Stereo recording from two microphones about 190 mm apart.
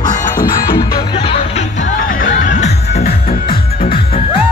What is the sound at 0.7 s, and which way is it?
Music, 20° left (ahead or behind).